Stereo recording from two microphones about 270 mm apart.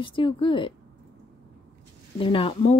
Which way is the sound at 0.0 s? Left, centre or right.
Centre.